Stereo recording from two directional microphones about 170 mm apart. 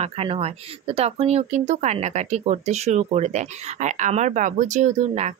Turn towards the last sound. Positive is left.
turn(degrees=-45)  # may be behind; listen again after turning